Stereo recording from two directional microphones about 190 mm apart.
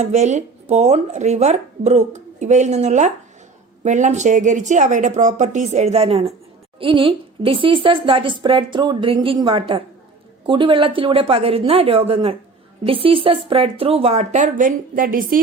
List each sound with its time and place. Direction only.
0.0 s speech: 35° right (ahead or behind)